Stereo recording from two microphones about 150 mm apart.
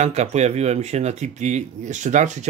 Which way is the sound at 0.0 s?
50° right (ahead or behind).